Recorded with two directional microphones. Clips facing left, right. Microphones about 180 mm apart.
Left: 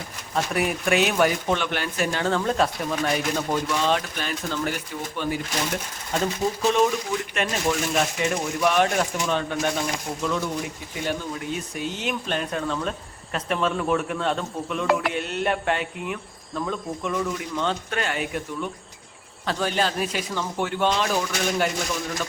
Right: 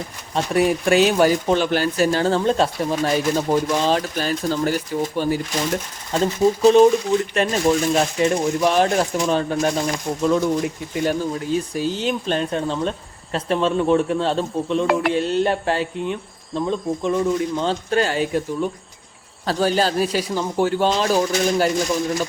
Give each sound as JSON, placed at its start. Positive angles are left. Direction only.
{"t": 0.3, "sound": "speech", "side_deg": -30}
{"t": 6.6, "sound": "speech", "side_deg": -35}